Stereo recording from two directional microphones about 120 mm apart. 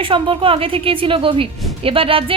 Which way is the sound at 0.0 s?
45° right (ahead or behind).